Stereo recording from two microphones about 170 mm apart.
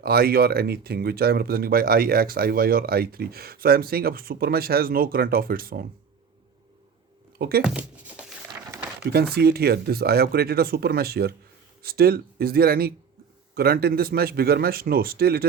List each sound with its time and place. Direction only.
0.0 s speech: 65° right (ahead or behind)
7.3 s speech: 65° right (ahead or behind)
7.6 s speech: 5° right (ahead or behind)
9.1 s speech: 65° right (ahead or behind)